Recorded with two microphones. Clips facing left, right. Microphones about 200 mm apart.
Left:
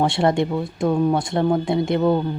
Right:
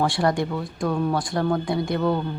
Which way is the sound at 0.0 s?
25° left (ahead or behind).